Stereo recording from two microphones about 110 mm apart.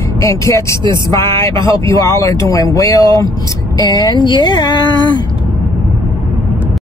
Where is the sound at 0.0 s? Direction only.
25° left (ahead or behind); by 5.3 s 45° left (ahead or behind).